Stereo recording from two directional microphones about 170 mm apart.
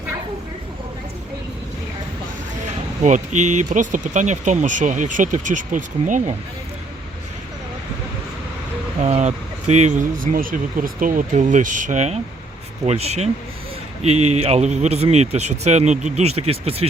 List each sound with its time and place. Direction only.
3.0 s speech: 45° right (ahead or behind)
9.0 s speech: 40° right (ahead or behind)